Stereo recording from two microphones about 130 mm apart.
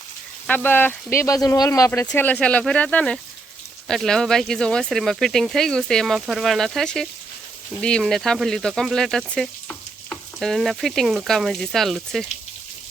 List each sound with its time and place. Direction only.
0.4 s speech: 15° left (ahead or behind)
2.1 s speech: 10° left (ahead or behind)